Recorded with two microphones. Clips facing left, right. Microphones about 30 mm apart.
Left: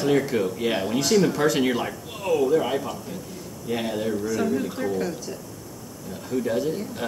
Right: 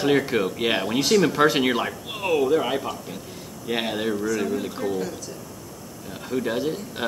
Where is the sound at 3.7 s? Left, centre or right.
Right.